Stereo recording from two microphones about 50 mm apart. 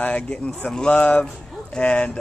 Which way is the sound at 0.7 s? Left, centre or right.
Centre.